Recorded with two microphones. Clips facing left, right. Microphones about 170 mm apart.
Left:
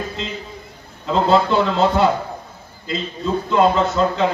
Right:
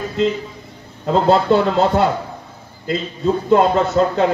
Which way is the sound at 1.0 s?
55° right (ahead or behind).